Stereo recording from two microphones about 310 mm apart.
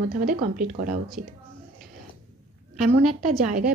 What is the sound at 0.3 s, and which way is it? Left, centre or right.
A woman's voice, right.